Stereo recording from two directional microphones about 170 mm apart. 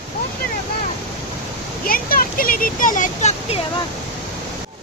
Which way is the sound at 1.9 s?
55° left (ahead or behind).